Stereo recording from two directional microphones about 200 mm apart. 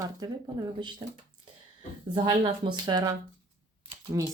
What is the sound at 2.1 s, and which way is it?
Speech, 25° right (ahead or behind).